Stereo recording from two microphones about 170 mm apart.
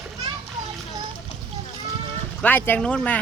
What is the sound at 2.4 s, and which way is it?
Speech, 10° left (ahead or behind).